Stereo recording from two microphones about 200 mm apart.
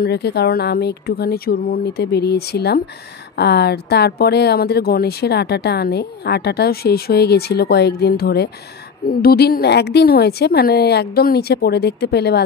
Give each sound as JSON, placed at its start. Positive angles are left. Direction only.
{"t": 0.0, "sound": "speech", "side_deg": 55}